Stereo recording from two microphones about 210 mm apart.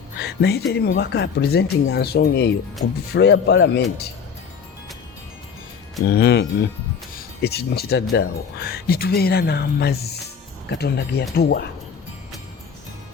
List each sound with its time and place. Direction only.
0.2 s speech: 50° left (ahead or behind)
6.1 s speech: 50° left (ahead or behind)